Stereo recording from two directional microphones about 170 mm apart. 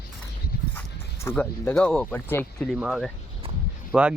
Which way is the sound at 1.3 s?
10° left (ahead or behind).